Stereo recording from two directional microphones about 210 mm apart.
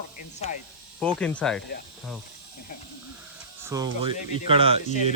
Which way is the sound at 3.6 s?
15° right (ahead or behind).